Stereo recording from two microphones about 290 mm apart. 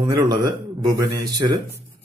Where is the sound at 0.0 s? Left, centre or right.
Centre.